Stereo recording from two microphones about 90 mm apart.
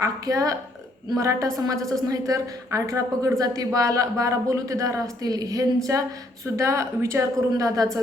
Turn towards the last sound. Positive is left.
turn(degrees=-40)  # may be behind; listen again after turning